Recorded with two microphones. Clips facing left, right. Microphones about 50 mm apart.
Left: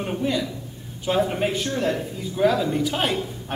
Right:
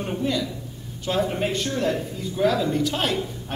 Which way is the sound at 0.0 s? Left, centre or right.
Centre.